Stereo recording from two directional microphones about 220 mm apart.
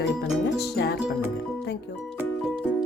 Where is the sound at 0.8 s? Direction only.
55° left (ahead or behind).